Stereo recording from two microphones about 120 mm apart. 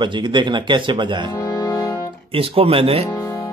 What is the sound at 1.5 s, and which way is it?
Music, 35° left (ahead or behind).